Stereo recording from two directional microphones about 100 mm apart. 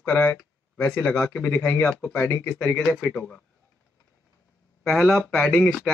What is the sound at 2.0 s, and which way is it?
Speech, 15° left (ahead or behind).